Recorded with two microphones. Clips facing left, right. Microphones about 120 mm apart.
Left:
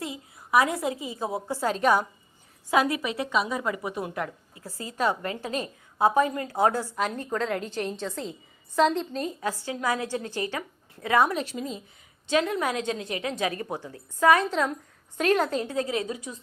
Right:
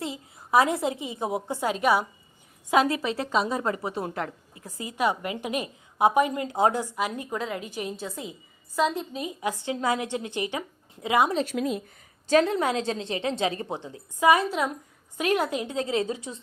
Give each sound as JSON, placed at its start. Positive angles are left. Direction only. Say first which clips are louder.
{"t": 0.0, "sound": "a woman's voice", "louder": "right 2 dB", "side_deg": -25}
{"t": 1.7, "sound": "a woman's voice", "louder": "left 1 dB", "side_deg": -10}
{"t": 2.6, "sound": "a woman's voice", "louder": "right 1 dB", "side_deg": -25}
{"t": 11.5, "sound": "speech", "louder": "right 6 dB", "side_deg": -70}
{"t": 12.3, "sound": "a woman's voice", "louder": "right 3 dB", "side_deg": -35}